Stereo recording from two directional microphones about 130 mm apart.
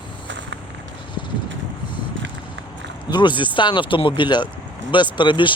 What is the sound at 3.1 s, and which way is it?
Speech, 35° left (ahead or behind).